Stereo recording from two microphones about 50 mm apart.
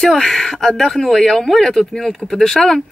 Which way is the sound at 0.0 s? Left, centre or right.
Centre.